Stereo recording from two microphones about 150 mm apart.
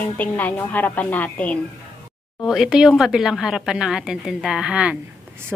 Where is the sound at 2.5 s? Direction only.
5° right (ahead or behind).